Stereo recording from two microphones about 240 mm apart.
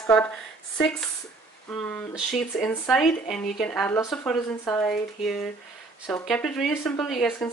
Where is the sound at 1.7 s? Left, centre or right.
Centre.